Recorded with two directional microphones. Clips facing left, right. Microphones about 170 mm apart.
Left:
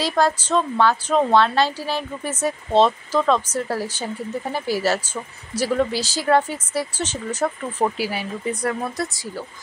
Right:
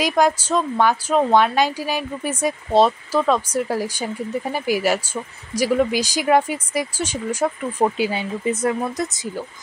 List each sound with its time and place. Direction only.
0.0 s a woman's voice: 15° right (ahead or behind)
8.0 s speech: 20° right (ahead or behind)